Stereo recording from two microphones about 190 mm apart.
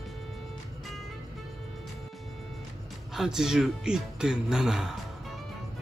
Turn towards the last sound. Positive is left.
turn(degrees=-5)  # may be behind; listen again after turning